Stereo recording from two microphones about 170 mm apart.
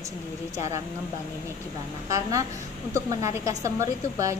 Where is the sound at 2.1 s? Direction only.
20° right (ahead or behind).